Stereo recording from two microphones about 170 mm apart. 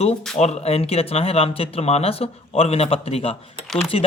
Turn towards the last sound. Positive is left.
turn(degrees=35)  # may be behind; listen again after turning